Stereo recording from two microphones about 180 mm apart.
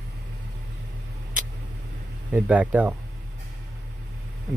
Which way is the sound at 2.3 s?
10° right (ahead or behind).